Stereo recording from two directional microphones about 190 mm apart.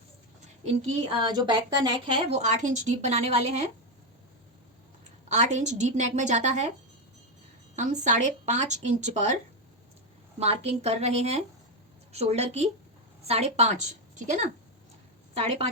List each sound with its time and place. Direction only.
0.6 s speech: 35° right (ahead or behind)
1.2 s a woman's voice: 25° right (ahead or behind)
5.3 s speech: 40° right (ahead or behind)
7.8 s a woman's voice: 40° right (ahead or behind)